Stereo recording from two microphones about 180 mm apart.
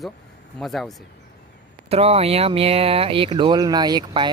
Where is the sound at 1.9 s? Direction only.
35° right (ahead or behind).